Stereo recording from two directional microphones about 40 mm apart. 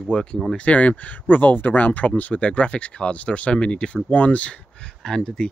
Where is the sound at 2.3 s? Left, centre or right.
Left.